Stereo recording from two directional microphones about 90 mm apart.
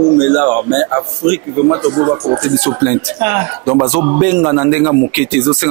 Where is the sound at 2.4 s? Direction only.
10° right (ahead or behind).